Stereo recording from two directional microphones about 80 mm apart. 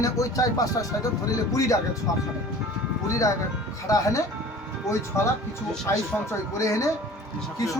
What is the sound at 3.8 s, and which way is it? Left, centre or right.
Speech, left.